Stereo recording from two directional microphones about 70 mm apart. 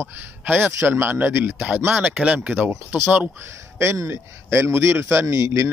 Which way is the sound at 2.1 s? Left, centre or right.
Centre.